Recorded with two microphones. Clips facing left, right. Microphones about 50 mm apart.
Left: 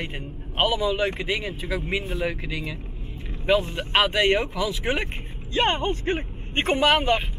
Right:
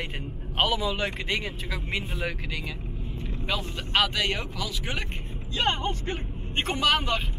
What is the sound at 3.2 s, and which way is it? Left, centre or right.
Speech, left.